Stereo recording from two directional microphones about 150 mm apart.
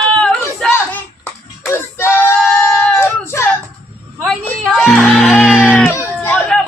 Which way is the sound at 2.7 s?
15° left (ahead or behind).